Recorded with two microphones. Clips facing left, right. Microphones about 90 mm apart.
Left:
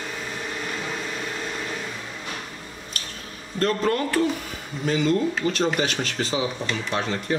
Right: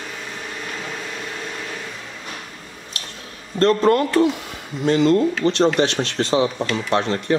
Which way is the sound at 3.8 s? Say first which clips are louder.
Right 8 dB; 25° right (ahead or behind).